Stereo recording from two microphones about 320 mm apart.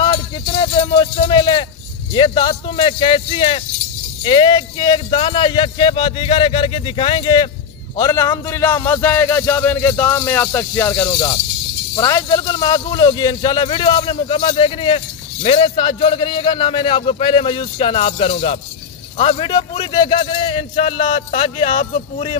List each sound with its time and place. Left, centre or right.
0.0 s music: centre
2.1 s a man's voice: centre